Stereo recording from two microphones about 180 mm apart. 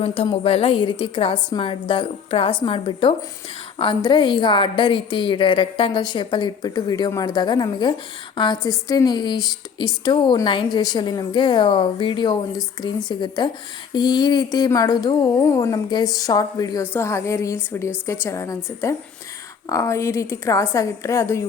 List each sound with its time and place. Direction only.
0.0 s a woman's voice: 30° left (ahead or behind); by 21.4 s 15° left (ahead or behind)